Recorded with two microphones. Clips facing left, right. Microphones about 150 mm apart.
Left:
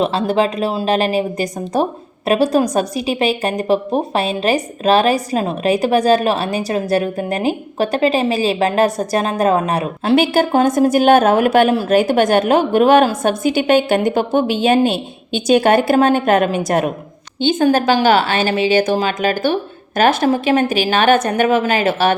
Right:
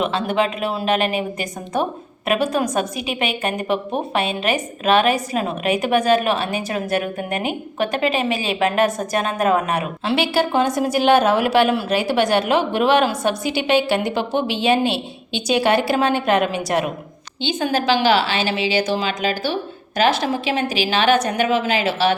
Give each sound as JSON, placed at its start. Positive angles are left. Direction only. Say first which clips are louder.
{"t": 0.0, "sound": "speech", "louder": "left 4 dB", "side_deg": 35}
{"t": 10.2, "sound": "a woman's voice", "louder": "left 4 dB", "side_deg": 45}